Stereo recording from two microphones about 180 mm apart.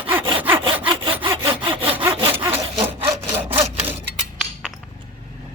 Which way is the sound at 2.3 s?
10° right (ahead or behind).